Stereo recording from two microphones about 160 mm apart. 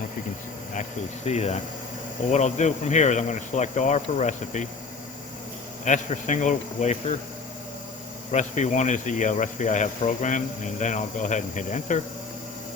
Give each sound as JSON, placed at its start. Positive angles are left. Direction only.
{"t": 0.7, "sound": "speech", "side_deg": 45}
{"t": 5.8, "sound": "speech", "side_deg": 50}
{"t": 8.3, "sound": "speech", "side_deg": 45}